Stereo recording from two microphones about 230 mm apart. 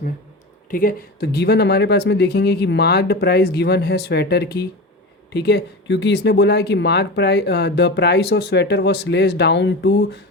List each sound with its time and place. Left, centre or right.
0.7 s speech: left